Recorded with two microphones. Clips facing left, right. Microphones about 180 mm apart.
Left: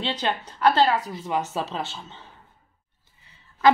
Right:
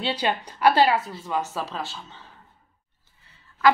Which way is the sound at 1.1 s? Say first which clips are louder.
Left 1 dB; 20° left (ahead or behind).